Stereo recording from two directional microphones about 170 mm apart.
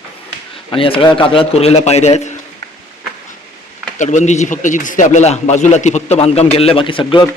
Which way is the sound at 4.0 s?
45° left (ahead or behind).